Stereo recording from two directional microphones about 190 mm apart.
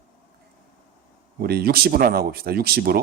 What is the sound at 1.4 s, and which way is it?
Speech, 55° right (ahead or behind).